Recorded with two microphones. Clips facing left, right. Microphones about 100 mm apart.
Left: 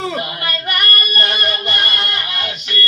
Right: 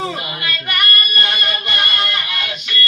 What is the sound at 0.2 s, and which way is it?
Music, 40° left (ahead or behind).